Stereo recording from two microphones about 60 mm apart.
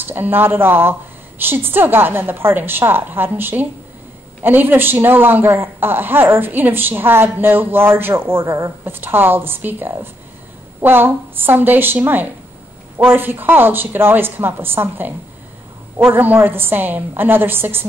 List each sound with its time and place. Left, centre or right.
0.0 s a man's voice: right